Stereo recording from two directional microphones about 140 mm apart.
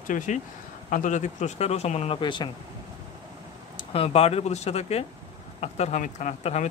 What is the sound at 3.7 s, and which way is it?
Speech, 45° left (ahead or behind).